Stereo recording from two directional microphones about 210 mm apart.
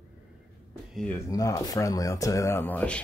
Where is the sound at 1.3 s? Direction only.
15° left (ahead or behind).